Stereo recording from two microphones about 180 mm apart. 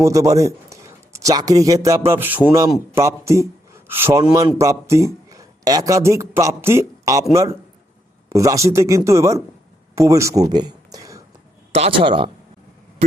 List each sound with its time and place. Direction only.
0.0 s a man's voice: 20° right (ahead or behind)
11.7 s a man's voice: 30° right (ahead or behind)